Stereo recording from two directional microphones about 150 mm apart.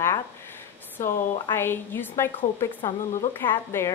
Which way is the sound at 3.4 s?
15° left (ahead or behind).